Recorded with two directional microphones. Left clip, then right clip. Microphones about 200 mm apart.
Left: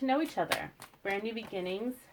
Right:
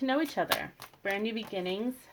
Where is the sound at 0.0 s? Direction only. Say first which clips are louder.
Right 1 dB; 35° right (ahead or behind).